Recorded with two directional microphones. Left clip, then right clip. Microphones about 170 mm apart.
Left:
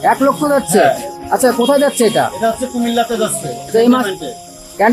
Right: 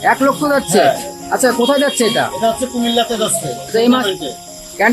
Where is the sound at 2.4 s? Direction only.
Centre (ahead or behind).